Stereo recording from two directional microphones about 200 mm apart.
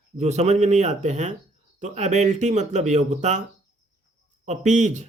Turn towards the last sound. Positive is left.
turn(degrees=-35)  # may be behind; listen again after turning